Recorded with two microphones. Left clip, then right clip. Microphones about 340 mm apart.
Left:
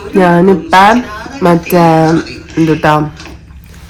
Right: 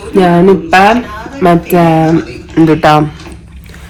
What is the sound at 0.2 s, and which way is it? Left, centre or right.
A man's voice, centre.